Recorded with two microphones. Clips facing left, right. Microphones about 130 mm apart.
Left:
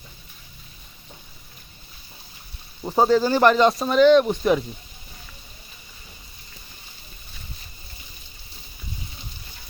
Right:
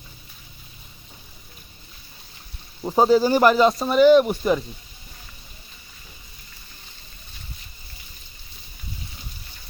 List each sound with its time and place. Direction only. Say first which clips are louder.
2.8 s speech: right 1 dB; 10° right (ahead or behind)